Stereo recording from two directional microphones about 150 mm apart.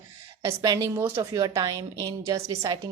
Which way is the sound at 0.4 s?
25° right (ahead or behind).